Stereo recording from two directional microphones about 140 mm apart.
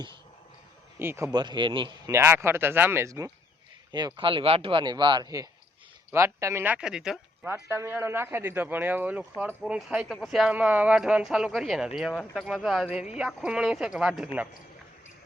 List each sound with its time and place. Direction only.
0.9 s speech: 15° right (ahead or behind)
1.3 s speech: 30° right (ahead or behind)
2.0 s speech: 20° right (ahead or behind)
3.9 s speech: 35° right (ahead or behind); by 7.2 s 5° right (ahead or behind)
7.7 s speech: 15° right (ahead or behind)